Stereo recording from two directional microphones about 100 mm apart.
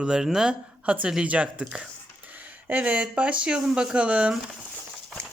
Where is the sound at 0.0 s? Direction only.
5° right (ahead or behind).